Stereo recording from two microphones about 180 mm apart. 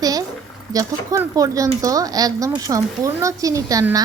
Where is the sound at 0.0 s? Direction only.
20° right (ahead or behind).